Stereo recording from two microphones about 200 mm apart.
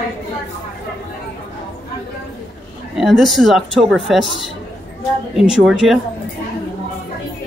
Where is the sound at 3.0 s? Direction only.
Centre (ahead or behind).